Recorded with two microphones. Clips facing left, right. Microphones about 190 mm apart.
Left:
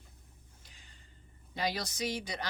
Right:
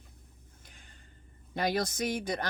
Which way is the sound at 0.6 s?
55° right (ahead or behind).